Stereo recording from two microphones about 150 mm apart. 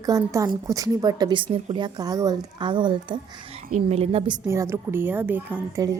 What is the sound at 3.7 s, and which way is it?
Speech, 45° right (ahead or behind).